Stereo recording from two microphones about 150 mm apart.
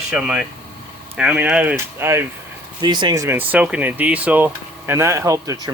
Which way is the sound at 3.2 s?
10° right (ahead or behind).